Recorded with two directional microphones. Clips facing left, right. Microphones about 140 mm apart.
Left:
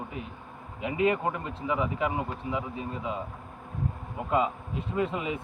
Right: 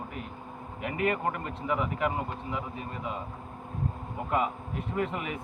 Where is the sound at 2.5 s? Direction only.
15° left (ahead or behind).